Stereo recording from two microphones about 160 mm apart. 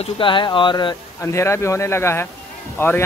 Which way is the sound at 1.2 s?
15° left (ahead or behind).